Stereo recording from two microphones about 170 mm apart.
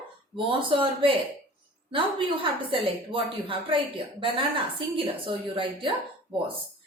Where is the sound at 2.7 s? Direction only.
30° right (ahead or behind).